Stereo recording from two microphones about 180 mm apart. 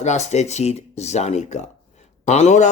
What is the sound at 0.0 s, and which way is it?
Speech, 40° left (ahead or behind).